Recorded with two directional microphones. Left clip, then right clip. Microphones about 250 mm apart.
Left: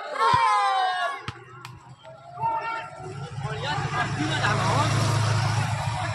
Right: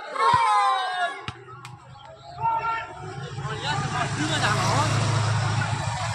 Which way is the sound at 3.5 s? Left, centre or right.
Right.